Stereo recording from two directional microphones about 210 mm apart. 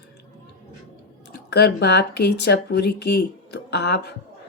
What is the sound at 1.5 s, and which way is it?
Speech, 50° left (ahead or behind).